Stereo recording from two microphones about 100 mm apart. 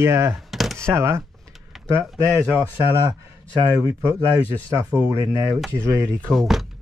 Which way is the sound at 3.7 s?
30° right (ahead or behind).